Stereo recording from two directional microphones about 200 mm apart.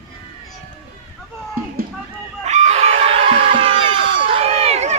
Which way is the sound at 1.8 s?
45° right (ahead or behind).